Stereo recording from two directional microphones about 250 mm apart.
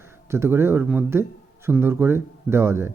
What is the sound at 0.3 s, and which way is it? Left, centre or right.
Speech, centre.